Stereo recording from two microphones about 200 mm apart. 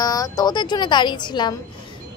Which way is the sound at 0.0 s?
20° left (ahead or behind).